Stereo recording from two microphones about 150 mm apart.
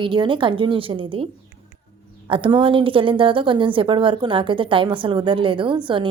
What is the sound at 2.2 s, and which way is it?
A woman's voice, 35° right (ahead or behind).